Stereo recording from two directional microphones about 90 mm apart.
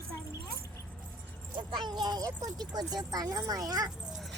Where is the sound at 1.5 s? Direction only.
55° right (ahead or behind).